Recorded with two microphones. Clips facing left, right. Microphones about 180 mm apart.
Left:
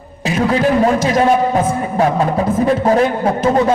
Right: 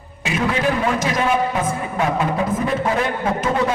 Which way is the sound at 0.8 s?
40° left (ahead or behind).